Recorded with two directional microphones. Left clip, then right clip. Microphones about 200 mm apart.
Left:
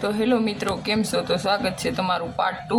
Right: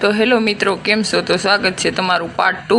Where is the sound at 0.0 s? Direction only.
20° right (ahead or behind).